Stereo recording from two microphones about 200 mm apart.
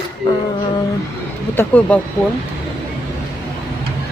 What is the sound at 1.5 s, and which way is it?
Speech, 5° left (ahead or behind).